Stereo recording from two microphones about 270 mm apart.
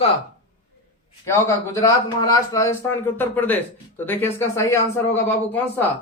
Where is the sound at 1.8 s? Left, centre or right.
Centre.